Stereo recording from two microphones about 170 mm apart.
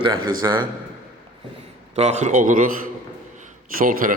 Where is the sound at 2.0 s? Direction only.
40° right (ahead or behind).